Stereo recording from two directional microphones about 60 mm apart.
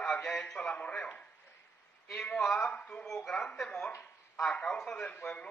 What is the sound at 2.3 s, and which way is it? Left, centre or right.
Speech, centre.